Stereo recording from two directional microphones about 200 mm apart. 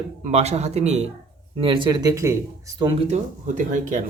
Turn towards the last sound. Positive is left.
turn(degrees=-40)  # may be behind; listen again after turning